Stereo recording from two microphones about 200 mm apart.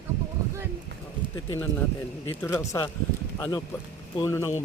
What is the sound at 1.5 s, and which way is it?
Speech, 10° left (ahead or behind).